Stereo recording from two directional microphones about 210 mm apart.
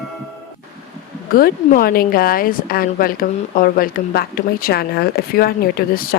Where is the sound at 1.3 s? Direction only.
45° left (ahead or behind).